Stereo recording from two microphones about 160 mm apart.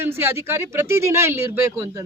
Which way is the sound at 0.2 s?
15° right (ahead or behind).